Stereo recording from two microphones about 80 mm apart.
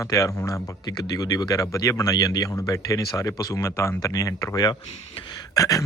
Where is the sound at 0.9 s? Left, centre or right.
Left.